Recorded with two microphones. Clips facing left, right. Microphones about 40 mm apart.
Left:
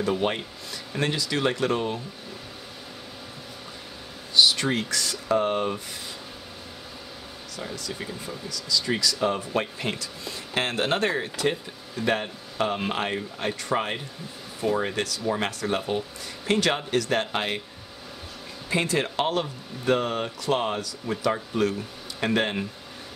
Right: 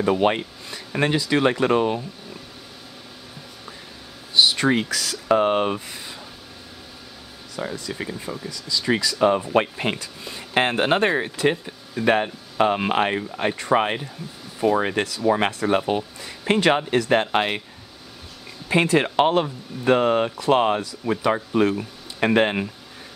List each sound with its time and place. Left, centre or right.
0.0 s speech: right
0.9 s speech: right
4.4 s speech: right
5.4 s speech: right
7.5 s speech: right
9.2 s speech: right
14.8 s speech: right
16.4 s speech: right
18.7 s speech: right